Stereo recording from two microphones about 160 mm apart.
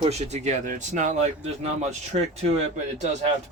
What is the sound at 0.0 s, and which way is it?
Speech, 45° right (ahead or behind).